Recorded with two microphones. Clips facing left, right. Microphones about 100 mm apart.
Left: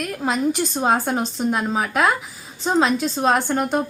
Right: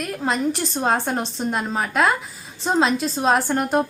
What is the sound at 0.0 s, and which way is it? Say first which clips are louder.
A woman's voice: left 1 dB; centre (ahead or behind).